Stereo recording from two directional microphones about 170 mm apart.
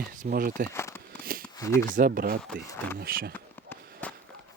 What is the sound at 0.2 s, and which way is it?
Speech, 55° right (ahead or behind).